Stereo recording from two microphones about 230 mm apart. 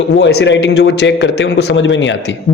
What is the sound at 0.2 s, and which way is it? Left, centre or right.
A man's voice, left.